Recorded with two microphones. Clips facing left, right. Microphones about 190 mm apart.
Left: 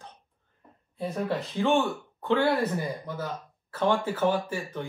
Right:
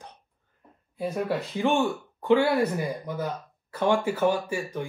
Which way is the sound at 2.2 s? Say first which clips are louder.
Right 3 dB; 15° right (ahead or behind).